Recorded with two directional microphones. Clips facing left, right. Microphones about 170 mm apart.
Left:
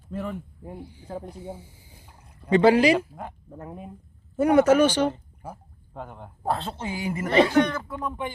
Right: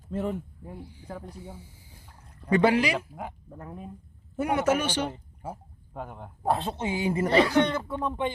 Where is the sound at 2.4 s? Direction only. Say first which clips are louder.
Left 4 dB; 25° left (ahead or behind).